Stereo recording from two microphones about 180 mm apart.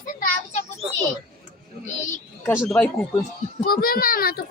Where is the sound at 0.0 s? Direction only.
50° left (ahead or behind).